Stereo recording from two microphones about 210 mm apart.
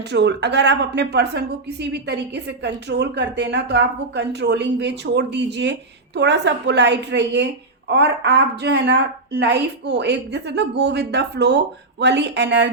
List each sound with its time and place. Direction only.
0.1 s a woman's voice: 55° right (ahead or behind)